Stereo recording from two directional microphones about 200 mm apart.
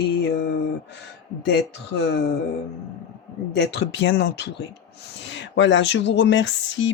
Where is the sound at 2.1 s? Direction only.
55° left (ahead or behind).